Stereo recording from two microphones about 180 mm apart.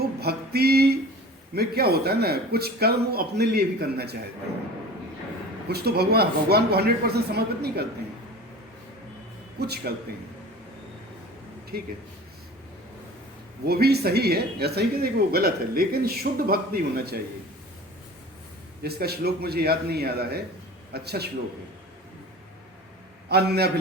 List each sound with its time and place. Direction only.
0.0 s music: 60° right (ahead or behind)
1.5 s speech: 60° right (ahead or behind)
5.6 s speech: 60° right (ahead or behind)
9.6 s speech: 60° right (ahead or behind)
11.7 s speech: 55° right (ahead or behind)
13.7 s speech: 60° right (ahead or behind)
18.8 s speech: 60° right (ahead or behind)
23.3 s speech: 65° right (ahead or behind)